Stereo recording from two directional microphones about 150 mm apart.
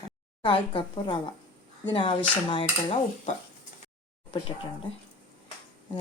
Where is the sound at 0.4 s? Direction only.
35° left (ahead or behind).